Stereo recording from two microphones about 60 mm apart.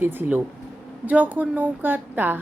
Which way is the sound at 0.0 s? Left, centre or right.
Right.